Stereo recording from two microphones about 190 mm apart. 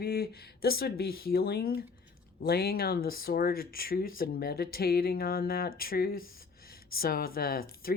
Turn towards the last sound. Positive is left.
turn(degrees=50)  # may be behind; listen again after turning